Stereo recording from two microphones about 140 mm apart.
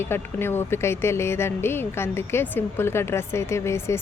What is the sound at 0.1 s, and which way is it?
Speech, 15° left (ahead or behind).